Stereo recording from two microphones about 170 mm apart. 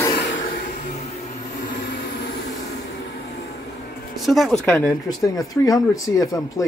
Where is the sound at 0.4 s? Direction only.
50° left (ahead or behind).